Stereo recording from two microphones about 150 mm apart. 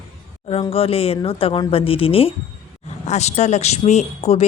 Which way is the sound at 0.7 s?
40° left (ahead or behind).